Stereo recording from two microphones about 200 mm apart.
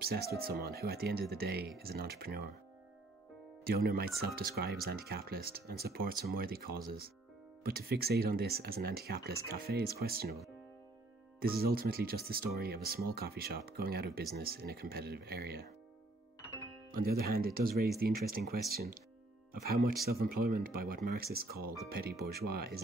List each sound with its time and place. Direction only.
0.0 s speech: 50° right (ahead or behind)
3.6 s speech: 50° right (ahead or behind)
11.3 s speech: 50° right (ahead or behind)
16.9 s speech: 50° right (ahead or behind)
20.1 s speech: 50° right (ahead or behind)